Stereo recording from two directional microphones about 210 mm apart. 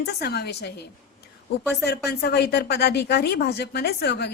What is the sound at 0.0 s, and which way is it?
A woman's voice, 50° left (ahead or behind).